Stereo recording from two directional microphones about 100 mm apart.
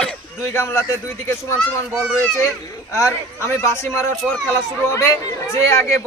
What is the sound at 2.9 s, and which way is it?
A man's voice, 30° left (ahead or behind).